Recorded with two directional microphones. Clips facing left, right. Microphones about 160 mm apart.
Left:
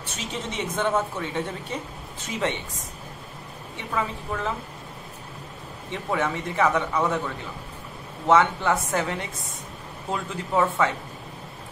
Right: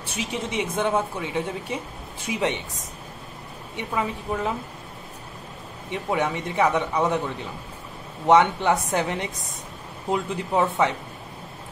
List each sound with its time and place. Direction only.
0.0 s speech: 10° right (ahead or behind)
3.7 s speech: 15° right (ahead or behind)
5.9 s speech: 15° right (ahead or behind)
8.3 s a woman's voice: 20° right (ahead or behind)